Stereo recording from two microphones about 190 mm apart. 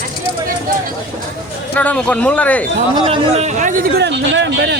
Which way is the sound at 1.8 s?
5° left (ahead or behind).